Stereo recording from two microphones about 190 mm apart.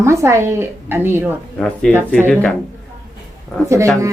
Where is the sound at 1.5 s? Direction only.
5° left (ahead or behind).